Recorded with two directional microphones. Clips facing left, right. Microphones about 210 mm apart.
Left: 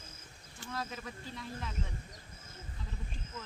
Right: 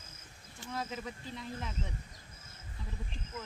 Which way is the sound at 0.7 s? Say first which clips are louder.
Right 2 dB; 20° right (ahead or behind).